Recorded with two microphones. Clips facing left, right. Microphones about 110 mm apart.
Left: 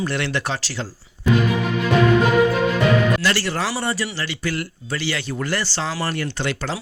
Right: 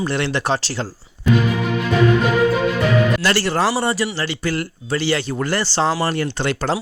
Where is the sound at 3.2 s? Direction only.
35° right (ahead or behind).